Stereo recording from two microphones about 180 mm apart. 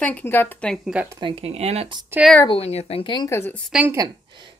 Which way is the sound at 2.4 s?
35° left (ahead or behind).